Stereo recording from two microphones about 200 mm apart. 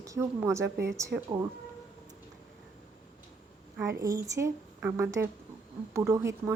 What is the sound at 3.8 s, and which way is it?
A woman's voice, 15° right (ahead or behind).